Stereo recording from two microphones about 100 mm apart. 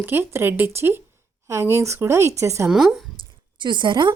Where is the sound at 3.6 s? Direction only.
50° right (ahead or behind).